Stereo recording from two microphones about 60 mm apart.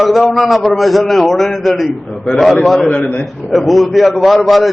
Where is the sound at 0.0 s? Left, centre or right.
Centre.